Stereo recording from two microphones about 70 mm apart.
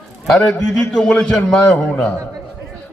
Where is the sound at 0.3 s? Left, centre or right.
Centre.